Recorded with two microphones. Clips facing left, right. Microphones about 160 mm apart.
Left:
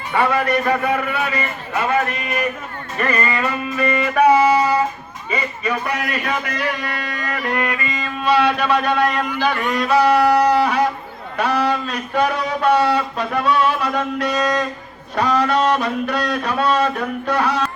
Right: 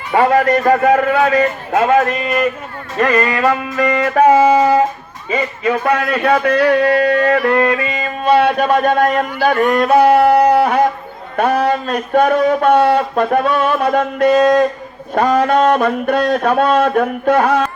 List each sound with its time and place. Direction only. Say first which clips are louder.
0.1 s speech: right 6 dB; 45° right (ahead or behind)
1.7 s music: right 6 dB; 90° right
5.3 s a man's voice: right 6 dB; 90° right; by 7.6 s 65° right (ahead or behind)
8.0 s speech: right 4 dB; 50° right (ahead or behind)